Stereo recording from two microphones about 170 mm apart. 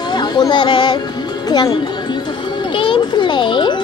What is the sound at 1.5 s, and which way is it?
Music, 25° left (ahead or behind).